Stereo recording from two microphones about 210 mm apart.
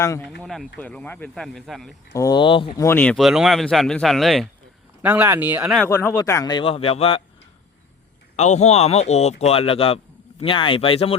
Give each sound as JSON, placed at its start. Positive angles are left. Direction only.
{"t": 0.0, "sound": "speech", "side_deg": 15}
{"t": 0.3, "sound": "speech", "side_deg": 0}
{"t": 2.1, "sound": "speech", "side_deg": 20}
{"t": 2.8, "sound": "speech", "side_deg": 10}
{"t": 5.0, "sound": "speech", "side_deg": -10}
{"t": 5.8, "sound": "speech", "side_deg": 10}
{"t": 8.4, "sound": "speech", "side_deg": 30}